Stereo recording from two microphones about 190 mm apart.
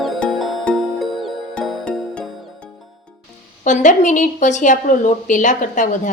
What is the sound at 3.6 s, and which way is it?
A woman's voice, 40° left (ahead or behind).